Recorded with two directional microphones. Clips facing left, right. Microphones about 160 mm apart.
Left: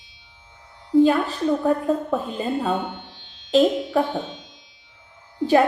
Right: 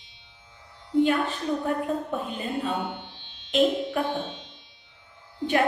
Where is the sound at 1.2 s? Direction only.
40° left (ahead or behind).